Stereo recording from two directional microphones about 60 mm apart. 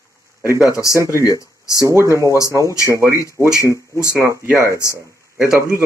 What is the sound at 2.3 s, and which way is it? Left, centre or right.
Speech, left.